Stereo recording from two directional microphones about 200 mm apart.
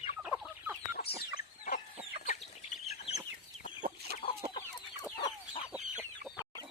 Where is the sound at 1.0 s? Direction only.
50° left (ahead or behind).